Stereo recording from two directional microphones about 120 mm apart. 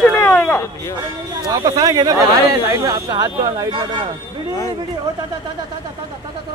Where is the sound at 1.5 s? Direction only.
30° right (ahead or behind).